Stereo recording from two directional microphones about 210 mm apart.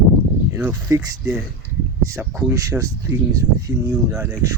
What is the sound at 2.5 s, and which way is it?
Speech, 15° right (ahead or behind).